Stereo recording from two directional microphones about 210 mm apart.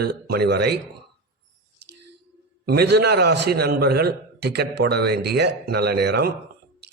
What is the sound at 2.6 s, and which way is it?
A man's voice, 50° right (ahead or behind).